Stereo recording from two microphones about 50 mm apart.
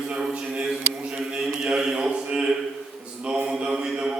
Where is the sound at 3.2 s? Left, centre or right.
Right.